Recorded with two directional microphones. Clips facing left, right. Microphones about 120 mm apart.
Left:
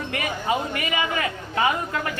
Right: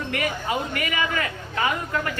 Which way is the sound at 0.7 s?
25° left (ahead or behind).